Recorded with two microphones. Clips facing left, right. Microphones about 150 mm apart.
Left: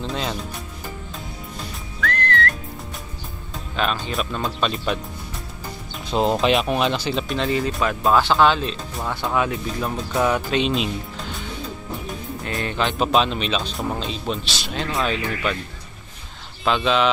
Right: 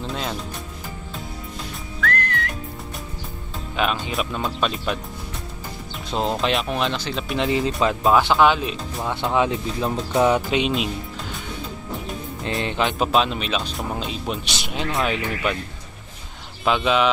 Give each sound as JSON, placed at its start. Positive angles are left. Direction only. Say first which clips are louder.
{"t": 0.0, "sound": "music", "louder": "left 1 dB", "side_deg": 0}
{"t": 2.0, "sound": "whistling", "louder": "left 2 dB", "side_deg": -5}
{"t": 3.8, "sound": "speech", "louder": "even", "side_deg": -15}
{"t": 6.0, "sound": "speech", "louder": "left 4 dB", "side_deg": 5}
{"t": 7.2, "sound": "speech", "louder": "right 5 dB", "side_deg": -15}
{"t": 12.4, "sound": "speech", "louder": "right 1 dB", "side_deg": -20}
{"t": 13.0, "sound": "speech", "louder": "left 2 dB", "side_deg": -5}
{"t": 16.6, "sound": "speech", "louder": "even", "side_deg": -10}